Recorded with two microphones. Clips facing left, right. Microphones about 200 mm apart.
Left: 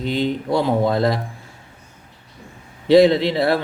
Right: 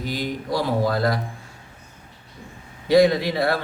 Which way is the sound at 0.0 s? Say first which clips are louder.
Left 6 dB; 25° left (ahead or behind).